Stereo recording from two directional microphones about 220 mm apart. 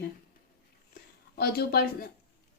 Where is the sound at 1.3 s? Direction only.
45° left (ahead or behind).